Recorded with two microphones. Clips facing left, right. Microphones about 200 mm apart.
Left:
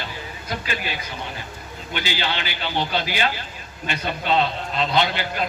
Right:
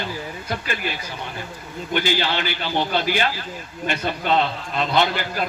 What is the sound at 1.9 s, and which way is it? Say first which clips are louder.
A man's voice: right 5 dB; 50° right (ahead or behind).